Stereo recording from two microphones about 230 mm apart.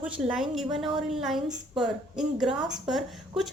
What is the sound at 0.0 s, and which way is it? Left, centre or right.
A woman's voice, centre.